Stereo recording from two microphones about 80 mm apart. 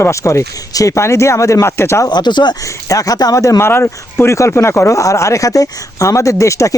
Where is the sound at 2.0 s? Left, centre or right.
Left.